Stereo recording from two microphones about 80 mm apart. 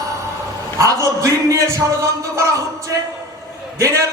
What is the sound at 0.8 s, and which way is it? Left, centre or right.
Music, right.